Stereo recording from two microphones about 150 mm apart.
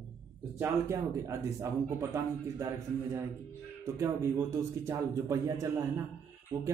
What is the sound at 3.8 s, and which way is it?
Speech, 20° right (ahead or behind).